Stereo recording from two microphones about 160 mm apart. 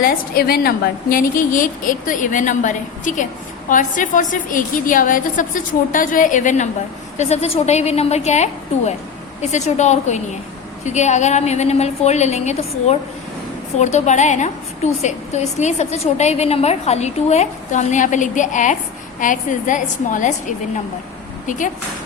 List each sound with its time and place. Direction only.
0.0 s a woman's voice: 70° left (ahead or behind)
1.1 s a woman's voice: 55° left (ahead or behind)